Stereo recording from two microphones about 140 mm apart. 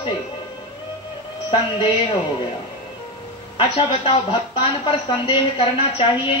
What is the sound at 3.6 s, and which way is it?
Speech, 35° left (ahead or behind).